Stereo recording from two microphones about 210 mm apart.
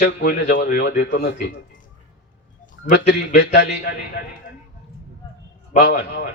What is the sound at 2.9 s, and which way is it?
Speech, 55° left (ahead or behind).